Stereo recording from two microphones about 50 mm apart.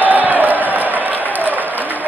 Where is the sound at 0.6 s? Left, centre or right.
Right.